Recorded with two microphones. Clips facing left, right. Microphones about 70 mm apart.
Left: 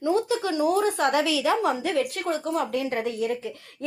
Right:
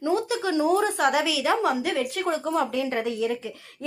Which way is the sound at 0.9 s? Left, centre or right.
Right.